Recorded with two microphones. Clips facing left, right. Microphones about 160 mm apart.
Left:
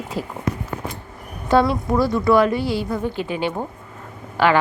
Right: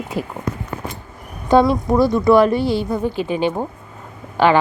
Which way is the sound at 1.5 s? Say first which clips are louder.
Right 3 dB; 20° right (ahead or behind).